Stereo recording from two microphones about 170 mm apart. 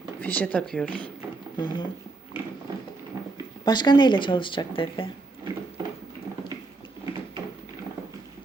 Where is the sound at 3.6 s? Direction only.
25° left (ahead or behind).